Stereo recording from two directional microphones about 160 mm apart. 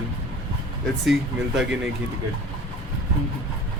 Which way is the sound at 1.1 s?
Centre (ahead or behind).